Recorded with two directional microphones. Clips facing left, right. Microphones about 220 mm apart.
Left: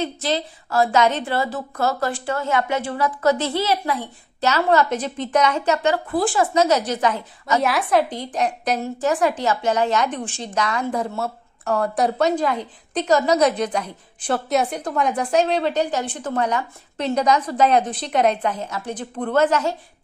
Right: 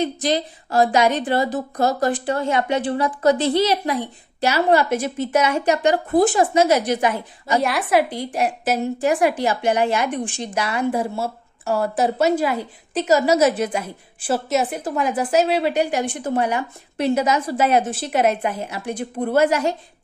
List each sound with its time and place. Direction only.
0.0 s a woman's voice: 15° right (ahead or behind)
6.5 s a woman's voice: 10° right (ahead or behind)
7.6 s a woman's voice: centre (ahead or behind)
8.0 s a woman's voice: 10° right (ahead or behind)